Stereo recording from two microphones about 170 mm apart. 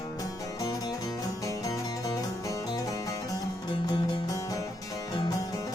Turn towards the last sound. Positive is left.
turn(degrees=20)  # may be behind; listen again after turning